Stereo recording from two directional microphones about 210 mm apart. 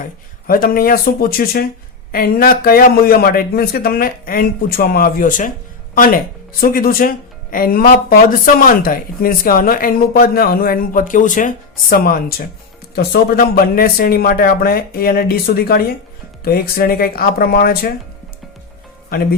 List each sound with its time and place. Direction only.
0.4 s speech: 45° left (ahead or behind)